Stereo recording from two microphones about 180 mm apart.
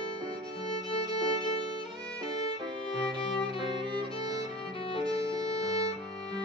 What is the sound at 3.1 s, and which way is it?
Music, 25° right (ahead or behind).